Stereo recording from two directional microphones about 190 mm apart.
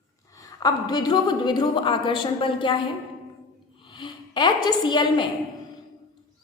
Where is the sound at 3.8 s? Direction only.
25° left (ahead or behind).